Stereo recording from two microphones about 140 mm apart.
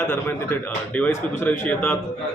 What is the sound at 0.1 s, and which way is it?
A man's voice, 10° left (ahead or behind).